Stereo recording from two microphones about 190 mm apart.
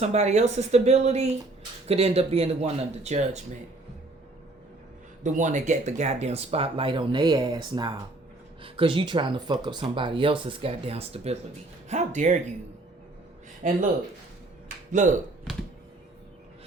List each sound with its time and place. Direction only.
0.0 s speech: 35° right (ahead or behind)
5.2 s speech: 40° right (ahead or behind)
13.6 s speech: 40° right (ahead or behind)
14.9 s speech: 40° right (ahead or behind)